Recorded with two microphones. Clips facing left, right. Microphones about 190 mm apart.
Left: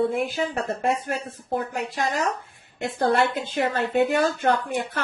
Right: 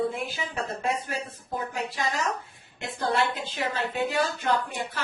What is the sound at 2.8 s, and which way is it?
A woman's voice, 55° left (ahead or behind).